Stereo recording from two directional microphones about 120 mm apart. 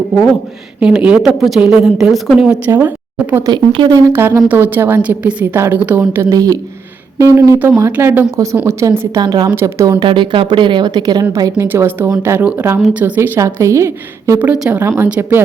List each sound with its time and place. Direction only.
0.8 s speech: 10° right (ahead or behind)
2.6 s a woman's voice: 15° right (ahead or behind)
3.4 s a woman's voice: 40° right (ahead or behind)
4.1 s a woman's voice: 20° right (ahead or behind)
9.2 s a woman's voice: 35° right (ahead or behind)
9.5 s a woman's voice: 20° right (ahead or behind)
10.0 s a woman's voice: 45° right (ahead or behind)
11.5 s a woman's voice: 20° right (ahead or behind)
14.3 s a woman's voice: 10° right (ahead or behind)
14.8 s a woman's voice: 20° right (ahead or behind)